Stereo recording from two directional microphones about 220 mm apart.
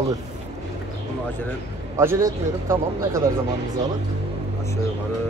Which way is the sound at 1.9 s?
15° right (ahead or behind).